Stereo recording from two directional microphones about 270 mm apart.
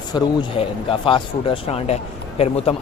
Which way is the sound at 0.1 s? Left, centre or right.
Centre.